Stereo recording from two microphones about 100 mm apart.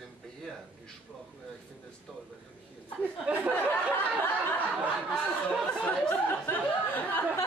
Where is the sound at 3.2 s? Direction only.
15° right (ahead or behind).